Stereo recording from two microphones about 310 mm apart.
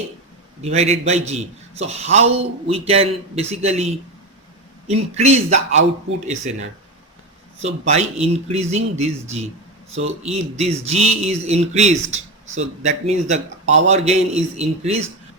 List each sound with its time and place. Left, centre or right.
0.6 s a man's voice: centre